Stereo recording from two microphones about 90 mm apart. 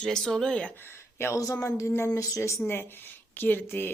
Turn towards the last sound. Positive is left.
turn(degrees=20)  # may be behind; listen again after turning